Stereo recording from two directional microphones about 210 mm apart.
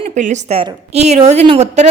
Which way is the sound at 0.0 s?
35° right (ahead or behind).